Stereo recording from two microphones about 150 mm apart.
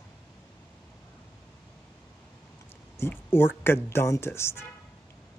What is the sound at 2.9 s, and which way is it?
Speech, 15° left (ahead or behind).